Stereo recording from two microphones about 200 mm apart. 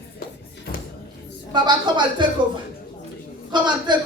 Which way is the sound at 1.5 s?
20° right (ahead or behind).